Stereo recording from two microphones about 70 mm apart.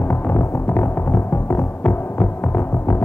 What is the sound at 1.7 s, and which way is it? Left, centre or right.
Throbbing, left.